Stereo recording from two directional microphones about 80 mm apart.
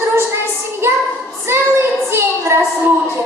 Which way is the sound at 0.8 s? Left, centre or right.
Right.